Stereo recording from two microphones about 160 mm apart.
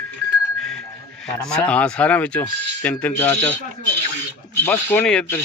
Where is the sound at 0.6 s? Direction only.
5° left (ahead or behind).